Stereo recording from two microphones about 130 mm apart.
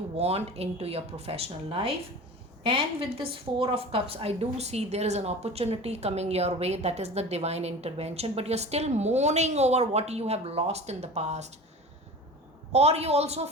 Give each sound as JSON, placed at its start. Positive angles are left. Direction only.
{"t": 0.2, "sound": "a woman's voice", "side_deg": -50}
{"t": 12.7, "sound": "a woman's voice", "side_deg": -55}